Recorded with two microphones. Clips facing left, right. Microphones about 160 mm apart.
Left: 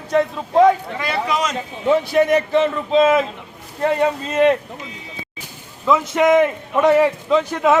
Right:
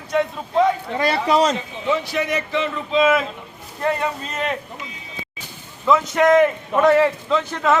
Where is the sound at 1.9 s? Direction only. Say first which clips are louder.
Left 7 dB; 50° left (ahead or behind).